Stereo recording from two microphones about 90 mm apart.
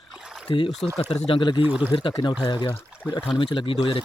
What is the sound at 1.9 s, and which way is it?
Speech, 70° left (ahead or behind).